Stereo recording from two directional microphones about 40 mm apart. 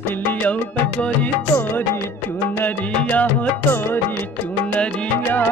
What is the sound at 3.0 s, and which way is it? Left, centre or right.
Music, left.